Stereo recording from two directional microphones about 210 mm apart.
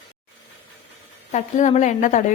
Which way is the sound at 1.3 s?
35° left (ahead or behind).